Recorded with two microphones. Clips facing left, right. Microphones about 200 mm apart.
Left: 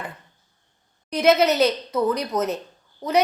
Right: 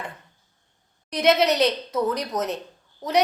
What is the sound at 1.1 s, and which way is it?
A woman's voice, centre (ahead or behind).